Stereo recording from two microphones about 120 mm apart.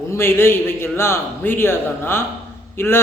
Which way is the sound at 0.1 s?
20° left (ahead or behind).